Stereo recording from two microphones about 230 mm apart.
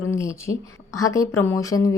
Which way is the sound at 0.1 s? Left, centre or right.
Centre.